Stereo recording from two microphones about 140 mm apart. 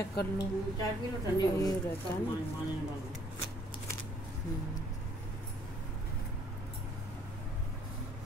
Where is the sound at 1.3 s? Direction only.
25° left (ahead or behind).